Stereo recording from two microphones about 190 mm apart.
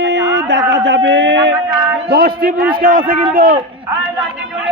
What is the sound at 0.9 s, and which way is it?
Speech, 70° right (ahead or behind).